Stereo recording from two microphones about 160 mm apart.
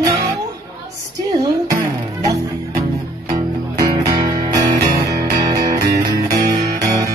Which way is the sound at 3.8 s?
20° right (ahead or behind).